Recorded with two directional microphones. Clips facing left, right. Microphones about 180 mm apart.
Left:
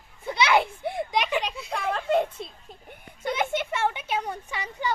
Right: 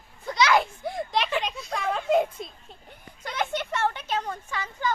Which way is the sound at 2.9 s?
10° left (ahead or behind).